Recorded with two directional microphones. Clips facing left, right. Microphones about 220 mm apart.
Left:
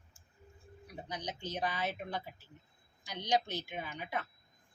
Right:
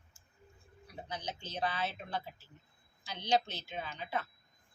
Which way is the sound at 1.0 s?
15° left (ahead or behind).